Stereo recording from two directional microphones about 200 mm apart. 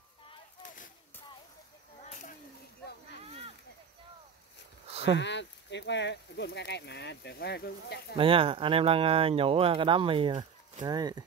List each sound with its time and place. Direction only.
2.0 s a sound: 40° left (ahead or behind)
5.1 s speech: 60° left (ahead or behind)
8.2 s speech: 25° right (ahead or behind)